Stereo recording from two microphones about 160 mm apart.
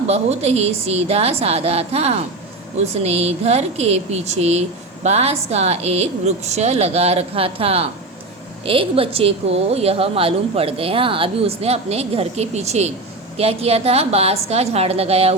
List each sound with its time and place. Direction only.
0.1 s a woman's voice: 40° right (ahead or behind)